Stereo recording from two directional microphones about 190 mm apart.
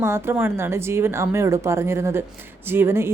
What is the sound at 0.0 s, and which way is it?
Speech, 10° right (ahead or behind).